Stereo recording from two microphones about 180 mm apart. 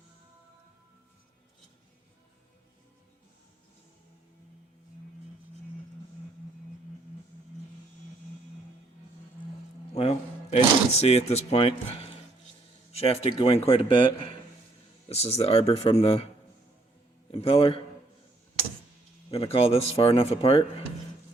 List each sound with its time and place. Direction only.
9.9 s music: 35° left (ahead or behind)
11.0 s speech: 35° left (ahead or behind)
15.1 s speech: 35° left (ahead or behind)
17.3 s speech: 30° left (ahead or behind)
19.3 s speech: 35° left (ahead or behind)